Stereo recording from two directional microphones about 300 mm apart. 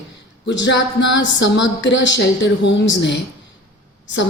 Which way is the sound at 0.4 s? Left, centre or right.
Left.